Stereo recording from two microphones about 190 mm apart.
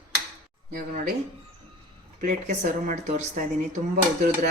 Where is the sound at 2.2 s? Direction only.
45° right (ahead or behind).